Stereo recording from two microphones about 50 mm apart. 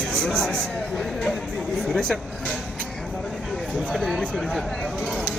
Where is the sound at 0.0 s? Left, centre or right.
Centre.